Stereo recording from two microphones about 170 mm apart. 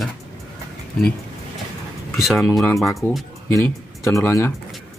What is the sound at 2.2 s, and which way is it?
Speech, centre (ahead or behind).